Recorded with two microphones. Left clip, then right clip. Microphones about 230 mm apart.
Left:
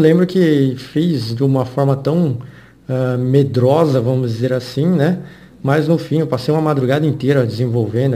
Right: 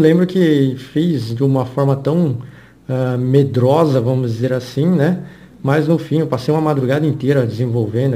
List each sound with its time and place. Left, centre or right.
0.0 s a man's voice: centre